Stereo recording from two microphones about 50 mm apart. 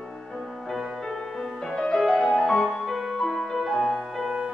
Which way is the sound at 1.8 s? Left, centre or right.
Centre.